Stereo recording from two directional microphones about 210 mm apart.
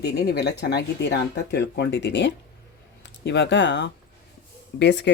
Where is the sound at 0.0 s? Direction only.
50° left (ahead or behind).